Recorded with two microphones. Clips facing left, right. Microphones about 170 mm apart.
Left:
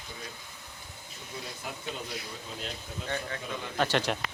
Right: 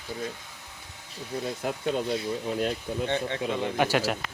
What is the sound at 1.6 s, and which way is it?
Speech, 55° right (ahead or behind).